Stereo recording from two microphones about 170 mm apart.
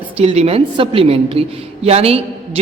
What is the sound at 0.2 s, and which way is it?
A woman's voice, 35° right (ahead or behind).